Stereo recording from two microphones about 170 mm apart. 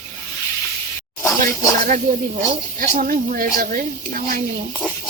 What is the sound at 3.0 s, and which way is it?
Speech, 55° right (ahead or behind).